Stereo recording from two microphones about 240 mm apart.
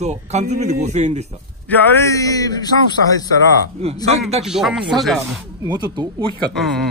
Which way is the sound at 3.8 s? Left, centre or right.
Right.